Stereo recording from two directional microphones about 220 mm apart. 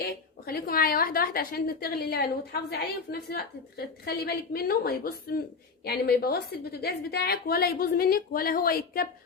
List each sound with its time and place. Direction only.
0.0 s a woman's voice: 45° left (ahead or behind)